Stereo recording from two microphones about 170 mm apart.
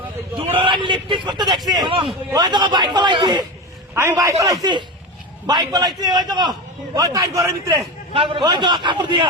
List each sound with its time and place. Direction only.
0.6 s a man's voice: 30° right (ahead or behind)
3.9 s a man's voice: 15° right (ahead or behind)
8.1 s a man's voice: 30° right (ahead or behind)